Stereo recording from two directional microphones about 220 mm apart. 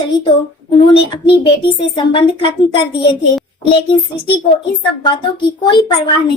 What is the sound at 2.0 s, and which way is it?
A woman's voice, 25° left (ahead or behind).